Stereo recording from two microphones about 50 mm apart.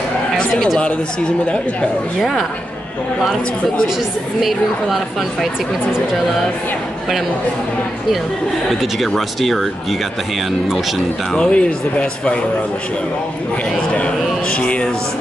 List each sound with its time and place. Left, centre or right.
1.5 s speech: centre
4.4 s a woman's voice: centre
9.0 s a woman's voice: centre
11.3 s speech: left
14.6 s speech: left